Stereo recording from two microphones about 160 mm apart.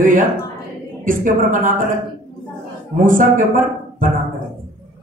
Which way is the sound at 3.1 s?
55° right (ahead or behind).